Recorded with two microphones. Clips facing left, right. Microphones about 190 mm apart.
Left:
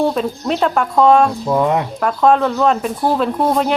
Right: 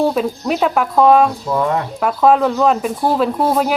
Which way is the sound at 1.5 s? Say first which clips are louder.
Left 2 dB; 20° left (ahead or behind).